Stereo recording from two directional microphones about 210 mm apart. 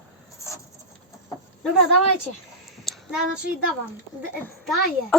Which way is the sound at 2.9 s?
Centre (ahead or behind).